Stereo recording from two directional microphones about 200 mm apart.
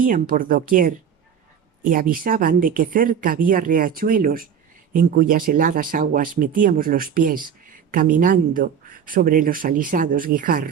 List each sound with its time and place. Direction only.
0.0 s speech: 45° right (ahead or behind)